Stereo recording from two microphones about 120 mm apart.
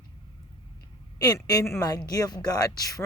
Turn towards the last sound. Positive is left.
turn(degrees=30)  # may be behind; listen again after turning